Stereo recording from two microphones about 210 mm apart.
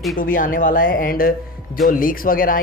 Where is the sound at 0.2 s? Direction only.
40° left (ahead or behind).